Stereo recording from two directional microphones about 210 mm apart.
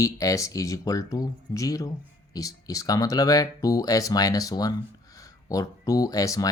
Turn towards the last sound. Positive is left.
turn(degrees=15)  # may be behind; listen again after turning